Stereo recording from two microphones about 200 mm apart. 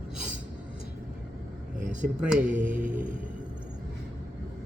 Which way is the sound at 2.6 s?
40° right (ahead or behind).